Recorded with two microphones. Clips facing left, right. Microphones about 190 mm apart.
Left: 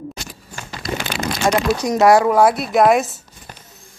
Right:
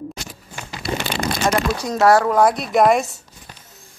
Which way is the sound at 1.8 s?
15° left (ahead or behind).